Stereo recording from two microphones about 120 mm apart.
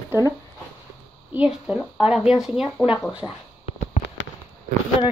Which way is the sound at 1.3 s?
10° right (ahead or behind).